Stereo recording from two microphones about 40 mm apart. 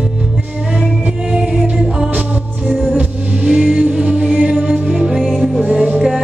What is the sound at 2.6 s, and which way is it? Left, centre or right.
Music, centre.